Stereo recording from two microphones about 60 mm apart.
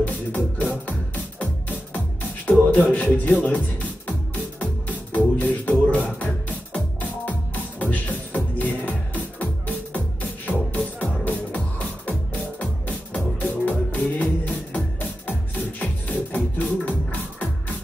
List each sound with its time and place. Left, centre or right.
0.0 s music: left
2.5 s speech: left
4.6 s music: left